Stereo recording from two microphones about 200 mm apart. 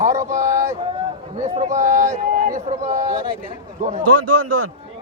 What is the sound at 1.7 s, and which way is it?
Speech, 40° right (ahead or behind).